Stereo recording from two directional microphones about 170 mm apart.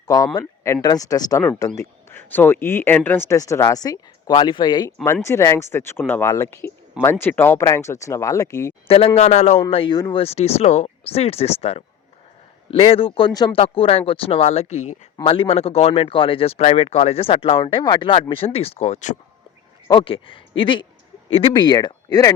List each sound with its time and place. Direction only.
0.3 s speech: 20° left (ahead or behind)
5.2 s speech: 15° left (ahead or behind)
8.9 s speech: 35° left (ahead or behind)
19.9 s speech: 30° left (ahead or behind)